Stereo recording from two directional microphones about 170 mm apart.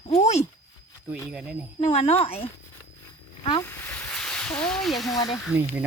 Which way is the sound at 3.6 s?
10° left (ahead or behind).